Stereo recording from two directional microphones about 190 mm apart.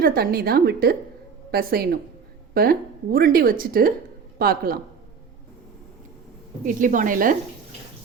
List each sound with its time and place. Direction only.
0.0 s speech: 50° right (ahead or behind)
6.7 s speech: 45° right (ahead or behind)